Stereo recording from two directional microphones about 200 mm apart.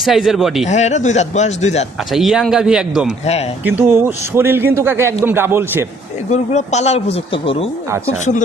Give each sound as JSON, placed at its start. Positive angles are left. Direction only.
{"t": 0.0, "sound": "speech", "side_deg": 0}
{"t": 0.7, "sound": "a man's voice", "side_deg": 35}
{"t": 2.1, "sound": "a man's voice", "side_deg": 0}
{"t": 6.3, "sound": "a man's voice", "side_deg": 35}
{"t": 8.0, "sound": "a man's voice", "side_deg": 40}